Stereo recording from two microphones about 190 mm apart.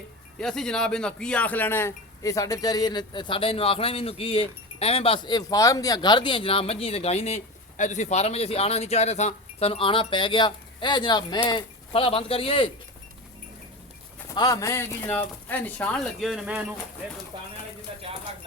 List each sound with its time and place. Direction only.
0.3 s speech: 5° left (ahead or behind); by 12.7 s 30° left (ahead or behind)
14.3 s speech: 20° left (ahead or behind); by 16.7 s 5° right (ahead or behind)
17.3 s speech: 25° right (ahead or behind)